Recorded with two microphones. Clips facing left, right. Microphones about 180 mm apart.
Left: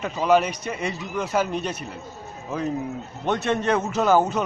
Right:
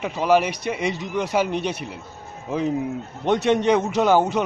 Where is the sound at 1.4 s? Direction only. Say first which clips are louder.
Right 3 dB; 70° right (ahead or behind).